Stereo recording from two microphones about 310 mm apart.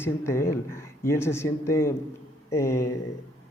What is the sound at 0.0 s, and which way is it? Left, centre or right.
Speech, centre.